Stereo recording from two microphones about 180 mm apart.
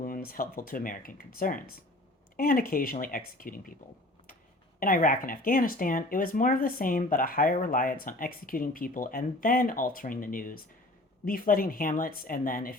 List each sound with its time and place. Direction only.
0.0 s speech: 55° left (ahead or behind)
4.8 s speech: 50° left (ahead or behind)